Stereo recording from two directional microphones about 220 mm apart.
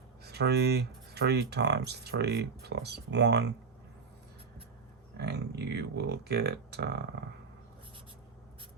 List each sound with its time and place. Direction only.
0.3 s speech: 50° right (ahead or behind)
5.1 s speech: 50° right (ahead or behind)